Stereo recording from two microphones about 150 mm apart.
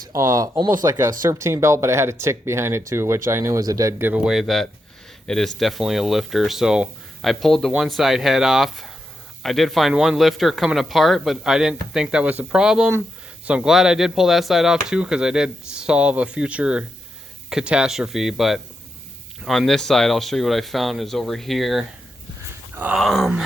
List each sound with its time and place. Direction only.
0.0 s speech: 20° right (ahead or behind); by 21.8 s centre (ahead or behind)
22.7 s groan: 10° right (ahead or behind)
23.0 s speech: centre (ahead or behind)